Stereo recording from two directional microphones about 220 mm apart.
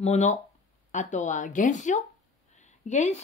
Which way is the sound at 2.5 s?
30° left (ahead or behind).